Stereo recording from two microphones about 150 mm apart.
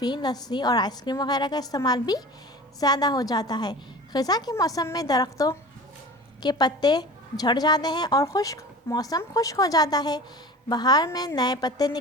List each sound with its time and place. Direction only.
0.0 s a woman's voice: 30° left (ahead or behind)